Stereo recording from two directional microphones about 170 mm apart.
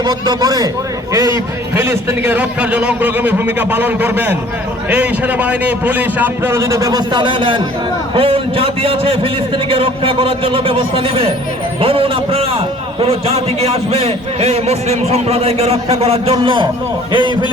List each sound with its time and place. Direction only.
0.0 s a man's voice: 25° right (ahead or behind)